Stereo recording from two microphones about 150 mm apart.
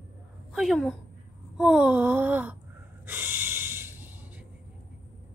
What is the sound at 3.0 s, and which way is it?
Snort, 15° right (ahead or behind).